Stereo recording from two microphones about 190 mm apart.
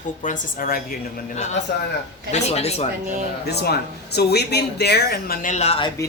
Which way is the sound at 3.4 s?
55° left (ahead or behind).